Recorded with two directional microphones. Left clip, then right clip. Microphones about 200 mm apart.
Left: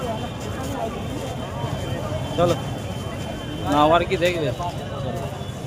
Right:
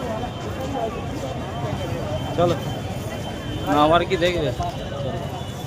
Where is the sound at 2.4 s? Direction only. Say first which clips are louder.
Even; 5° left (ahead or behind).